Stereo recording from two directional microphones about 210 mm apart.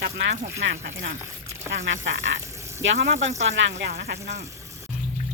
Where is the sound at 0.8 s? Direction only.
35° right (ahead or behind).